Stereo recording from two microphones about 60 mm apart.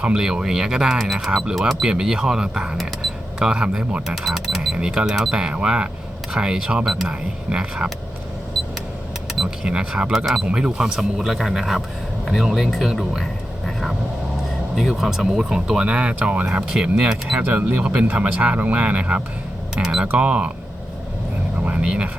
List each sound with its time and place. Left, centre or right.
0.0 s speech: centre
1.3 s speech: centre
1.5 s speech: centre
1.9 s speech: centre
7.1 s speech: centre
9.4 s speech: centre
14.8 s speech: centre
15.5 s speech: centre
16.6 s speech: centre
17.4 s speech: right
19.7 s speech: centre
21.6 s speech: right